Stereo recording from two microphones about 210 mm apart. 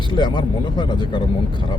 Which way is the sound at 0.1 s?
20° left (ahead or behind).